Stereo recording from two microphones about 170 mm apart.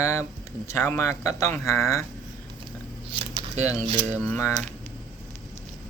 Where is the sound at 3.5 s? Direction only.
35° right (ahead or behind).